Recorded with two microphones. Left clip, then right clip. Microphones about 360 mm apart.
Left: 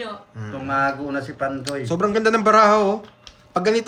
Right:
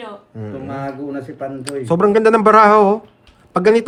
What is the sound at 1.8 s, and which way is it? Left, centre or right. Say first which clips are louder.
Speech: right 7 dB; centre.